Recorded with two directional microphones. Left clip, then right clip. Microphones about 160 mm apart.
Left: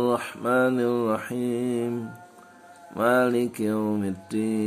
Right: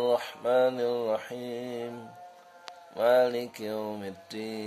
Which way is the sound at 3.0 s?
15° right (ahead or behind).